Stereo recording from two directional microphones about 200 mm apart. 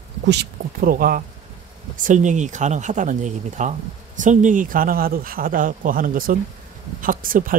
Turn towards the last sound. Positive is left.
turn(degrees=-45)  # may be behind; listen again after turning